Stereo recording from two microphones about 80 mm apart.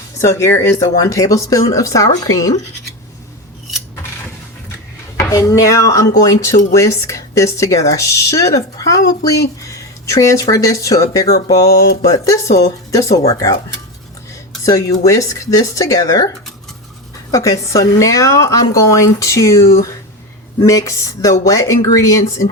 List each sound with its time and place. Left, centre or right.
0.2 s speech: left
5.3 s speech: left
14.6 s speech: left
17.3 s a woman's voice: left